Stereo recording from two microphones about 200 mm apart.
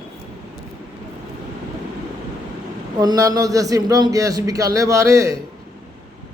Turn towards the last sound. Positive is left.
turn(degrees=-15)  # may be behind; listen again after turning